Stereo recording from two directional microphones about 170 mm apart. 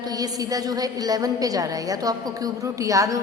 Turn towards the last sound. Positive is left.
turn(degrees=-20)  # may be behind; listen again after turning